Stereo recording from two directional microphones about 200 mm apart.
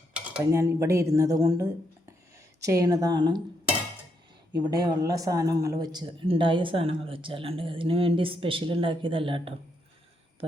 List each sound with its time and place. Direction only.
0.1 s speech: 5° right (ahead or behind)
4.5 s speech: 20° right (ahead or behind)